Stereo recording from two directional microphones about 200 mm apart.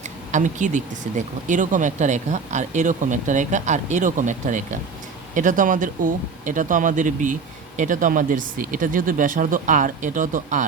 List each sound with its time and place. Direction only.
0.3 s speech: 40° right (ahead or behind)